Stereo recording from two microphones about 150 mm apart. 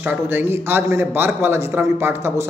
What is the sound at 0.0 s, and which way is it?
A man's voice, 10° right (ahead or behind).